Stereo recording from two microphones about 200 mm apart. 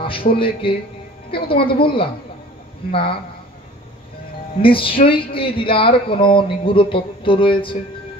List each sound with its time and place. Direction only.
0.3 s speech: 25° left (ahead or behind)
4.6 s speech: 25° left (ahead or behind)